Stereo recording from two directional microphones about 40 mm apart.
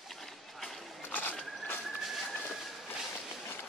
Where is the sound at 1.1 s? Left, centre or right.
Left.